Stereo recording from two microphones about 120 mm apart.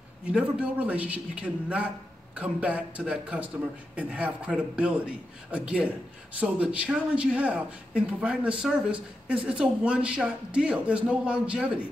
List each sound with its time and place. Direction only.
0.3 s speech: 10° right (ahead or behind)